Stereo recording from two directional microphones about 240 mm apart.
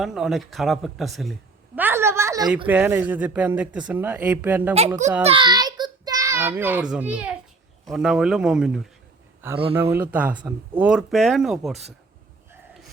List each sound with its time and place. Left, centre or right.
0.0 s a woman's voice: centre
5.2 s a child's voice: right; by 11.9 s centre